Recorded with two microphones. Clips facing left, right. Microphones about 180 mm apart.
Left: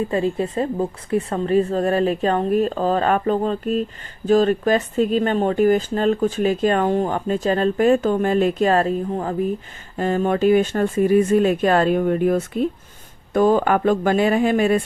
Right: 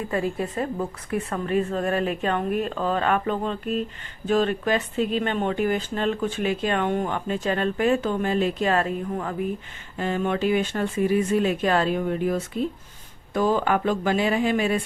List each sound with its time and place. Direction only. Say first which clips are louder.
0.1 s speech: left 5 dB; 25° left (ahead or behind); by 14.8 s 50° left (ahead or behind)